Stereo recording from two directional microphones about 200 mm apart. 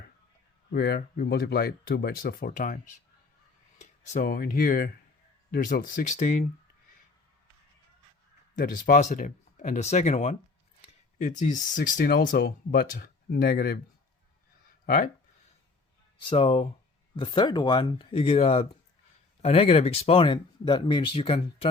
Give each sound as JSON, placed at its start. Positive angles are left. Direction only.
{"t": 0.7, "sound": "speech", "side_deg": 50}
{"t": 8.5, "sound": "speech", "side_deg": 40}
{"t": 14.8, "sound": "speech", "side_deg": 45}
{"t": 16.3, "sound": "speech", "side_deg": 25}